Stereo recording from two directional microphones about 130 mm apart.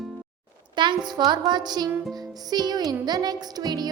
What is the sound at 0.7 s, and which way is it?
A woman's voice, 35° right (ahead or behind).